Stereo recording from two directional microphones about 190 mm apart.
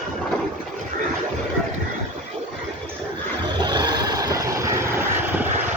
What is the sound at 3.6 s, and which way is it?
Vehicle, 20° right (ahead or behind).